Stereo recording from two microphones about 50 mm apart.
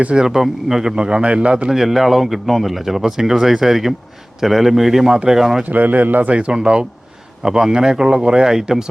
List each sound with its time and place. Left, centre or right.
0.0 s speech: right
0.3 s a man's voice: centre
1.7 s a man's voice: centre
5.6 s speech: right
6.3 s a man's voice: centre